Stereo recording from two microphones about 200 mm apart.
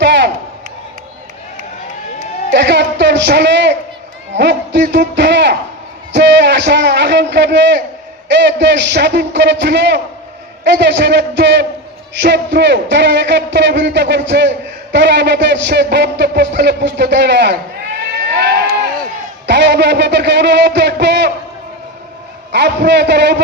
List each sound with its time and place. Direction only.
0.0 s a sound: 60° right (ahead or behind)
2.5 s a man's voice: 60° right (ahead or behind)
18.0 s sheep: 55° right (ahead or behind)
19.5 s a man's voice: 60° right (ahead or behind)
22.9 s a man's voice: 60° right (ahead or behind)